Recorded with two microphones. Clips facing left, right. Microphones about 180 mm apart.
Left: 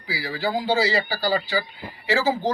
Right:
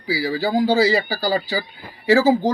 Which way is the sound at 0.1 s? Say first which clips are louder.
Right 6 dB; 40° right (ahead or behind).